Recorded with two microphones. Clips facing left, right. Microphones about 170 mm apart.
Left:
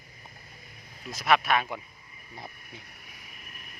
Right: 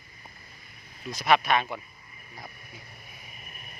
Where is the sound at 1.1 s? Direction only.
Centre (ahead or behind).